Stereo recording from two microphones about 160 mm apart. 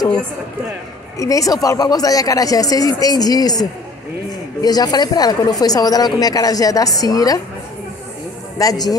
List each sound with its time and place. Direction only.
1.1 s a woman's voice: 20° left (ahead or behind)
8.5 s a woman's voice: 25° left (ahead or behind)